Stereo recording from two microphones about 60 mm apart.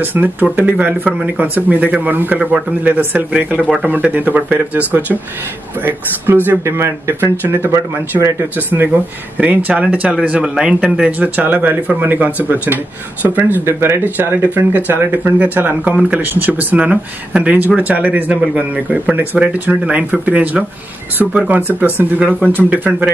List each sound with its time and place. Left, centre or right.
0.0 s speech: right
8.2 s speech: right
8.5 s speech: right
10.4 s a man's voice: centre
11.1 s speech: right
13.7 s speech: right